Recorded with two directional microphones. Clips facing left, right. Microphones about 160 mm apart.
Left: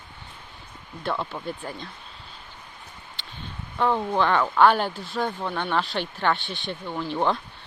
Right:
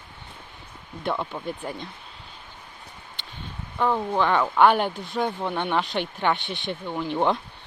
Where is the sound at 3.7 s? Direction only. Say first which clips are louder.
Even; 5° right (ahead or behind).